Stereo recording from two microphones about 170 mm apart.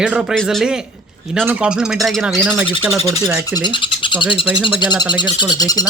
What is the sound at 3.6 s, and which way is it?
Speech, 25° left (ahead or behind).